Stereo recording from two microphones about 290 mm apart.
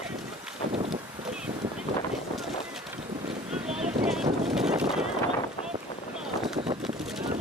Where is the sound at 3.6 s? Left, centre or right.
Centre.